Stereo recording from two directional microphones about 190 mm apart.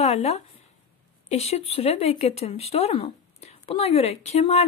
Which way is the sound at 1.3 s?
35° left (ahead or behind).